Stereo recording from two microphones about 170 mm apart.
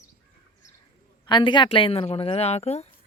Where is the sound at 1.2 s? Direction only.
25° left (ahead or behind).